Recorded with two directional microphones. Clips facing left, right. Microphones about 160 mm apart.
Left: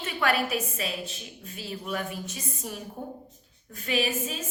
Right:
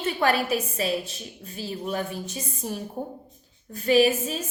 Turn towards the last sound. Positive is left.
turn(degrees=-35)  # may be behind; listen again after turning